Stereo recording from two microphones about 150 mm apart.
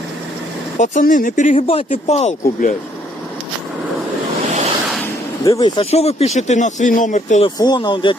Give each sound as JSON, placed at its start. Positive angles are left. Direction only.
{"t": 0.8, "sound": "speech", "side_deg": 60}
{"t": 1.6, "sound": "speech", "side_deg": 45}
{"t": 5.5, "sound": "speech", "side_deg": 25}
{"t": 7.4, "sound": "speech", "side_deg": 30}